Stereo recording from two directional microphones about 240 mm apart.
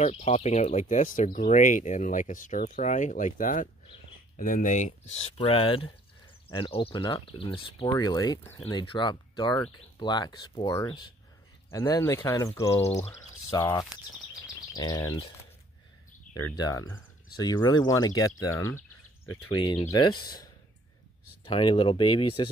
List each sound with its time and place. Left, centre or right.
0.0 s speech: left; by 12.8 s centre
12.8 s speech: left
13.5 s speech: centre
16.3 s speech: centre
19.2 s speech: left
19.6 s speech: centre